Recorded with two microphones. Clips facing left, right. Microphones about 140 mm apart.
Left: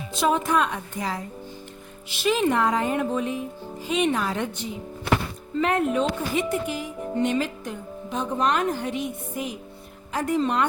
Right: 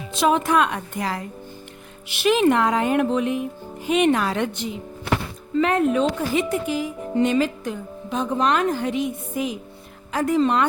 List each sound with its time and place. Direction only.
0.2 s a woman's voice: 85° right